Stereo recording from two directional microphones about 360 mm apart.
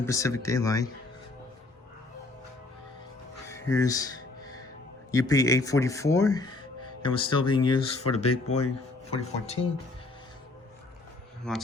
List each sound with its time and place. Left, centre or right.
0.0 s speech: centre
3.5 s speech: centre
5.1 s speech: centre
8.1 s a man's voice: left
9.0 s speech: centre
11.5 s speech: centre